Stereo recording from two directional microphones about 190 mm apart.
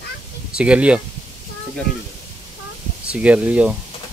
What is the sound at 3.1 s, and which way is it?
Speech, 5° right (ahead or behind).